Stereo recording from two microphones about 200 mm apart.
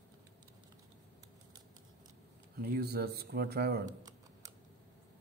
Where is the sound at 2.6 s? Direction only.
50° right (ahead or behind).